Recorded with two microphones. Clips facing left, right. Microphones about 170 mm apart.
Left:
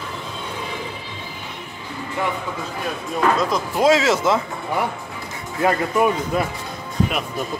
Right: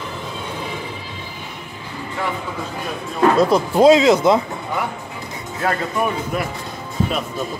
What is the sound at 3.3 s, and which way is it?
Speech, 30° right (ahead or behind).